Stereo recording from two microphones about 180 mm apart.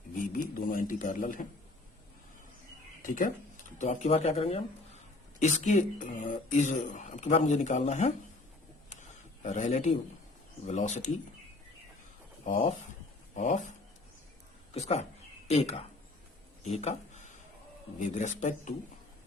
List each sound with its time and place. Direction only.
0.3 s speech: 50° left (ahead or behind)
3.0 s speech: 50° left (ahead or behind)
3.8 s speech: 40° left (ahead or behind)
8.9 s a sound: 40° left (ahead or behind)
10.7 s speech: 40° left (ahead or behind)
13.3 s speech: 40° left (ahead or behind)
16.6 s a sound: 35° left (ahead or behind)
18.1 s speech: 40° left (ahead or behind)